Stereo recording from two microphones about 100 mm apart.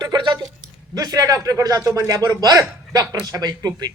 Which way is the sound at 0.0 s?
45° right (ahead or behind).